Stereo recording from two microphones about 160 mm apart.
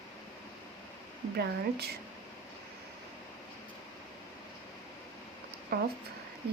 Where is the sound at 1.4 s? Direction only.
90° right.